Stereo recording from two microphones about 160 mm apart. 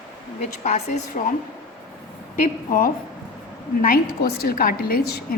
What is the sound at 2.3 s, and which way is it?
A woman's voice, 60° left (ahead or behind).